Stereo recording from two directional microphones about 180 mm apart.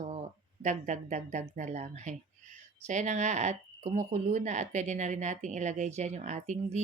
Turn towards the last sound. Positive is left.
turn(degrees=-40)  # may be behind; listen again after turning